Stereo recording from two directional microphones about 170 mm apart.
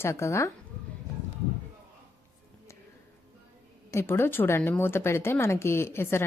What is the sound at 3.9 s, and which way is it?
A woman's voice, 15° left (ahead or behind).